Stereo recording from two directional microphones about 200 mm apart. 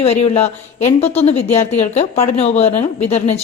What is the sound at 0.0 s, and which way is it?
Speech, 30° left (ahead or behind).